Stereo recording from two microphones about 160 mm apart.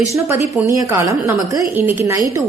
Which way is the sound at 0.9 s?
20° right (ahead or behind).